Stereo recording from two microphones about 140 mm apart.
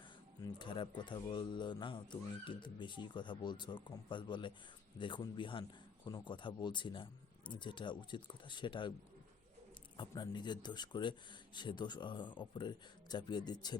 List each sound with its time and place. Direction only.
0.4 s speech: 35° left (ahead or behind)
10.0 s speech: 30° left (ahead or behind)